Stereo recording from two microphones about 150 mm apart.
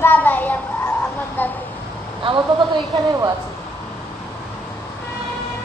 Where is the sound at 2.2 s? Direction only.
30° right (ahead or behind).